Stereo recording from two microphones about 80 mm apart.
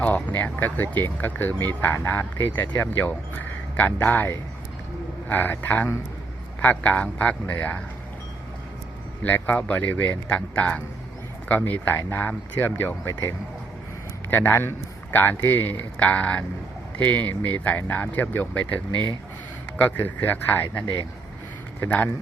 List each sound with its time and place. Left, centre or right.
0.0 s speech: centre
9.2 s speech: centre
19.8 s speech: left
21.8 s speech: centre